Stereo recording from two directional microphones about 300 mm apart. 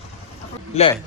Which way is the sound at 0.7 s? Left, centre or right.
Centre.